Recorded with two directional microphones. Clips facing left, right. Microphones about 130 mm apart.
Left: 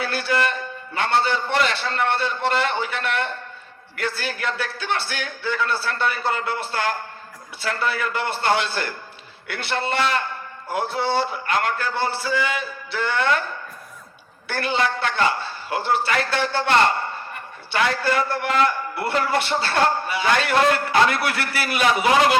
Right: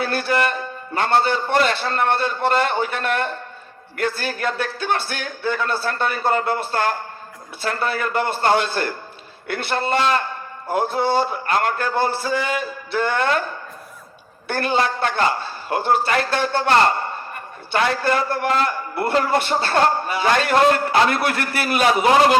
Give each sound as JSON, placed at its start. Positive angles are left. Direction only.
{"t": 0.0, "sound": "a man's voice", "side_deg": -50}
{"t": 14.5, "sound": "a man's voice", "side_deg": -45}